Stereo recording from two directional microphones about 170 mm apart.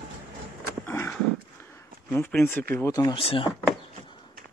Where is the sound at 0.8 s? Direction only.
15° left (ahead or behind).